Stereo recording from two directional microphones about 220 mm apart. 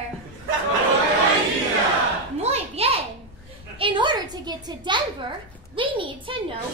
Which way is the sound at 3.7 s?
20° right (ahead or behind).